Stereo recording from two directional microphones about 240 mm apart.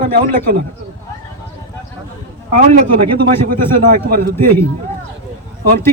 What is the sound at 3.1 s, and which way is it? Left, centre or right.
A man's voice, right.